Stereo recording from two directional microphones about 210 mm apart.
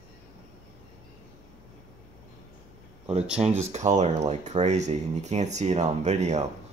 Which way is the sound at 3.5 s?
35° right (ahead or behind).